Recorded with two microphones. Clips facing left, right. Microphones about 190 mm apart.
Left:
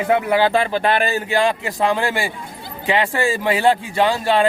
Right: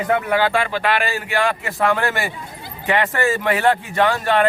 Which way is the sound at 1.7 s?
15° left (ahead or behind).